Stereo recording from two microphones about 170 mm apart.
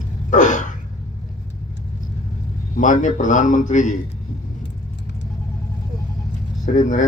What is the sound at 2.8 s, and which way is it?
A man's voice, 50° left (ahead or behind).